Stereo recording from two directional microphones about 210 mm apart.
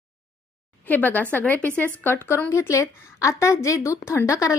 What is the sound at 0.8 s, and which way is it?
A woman's voice, 10° left (ahead or behind).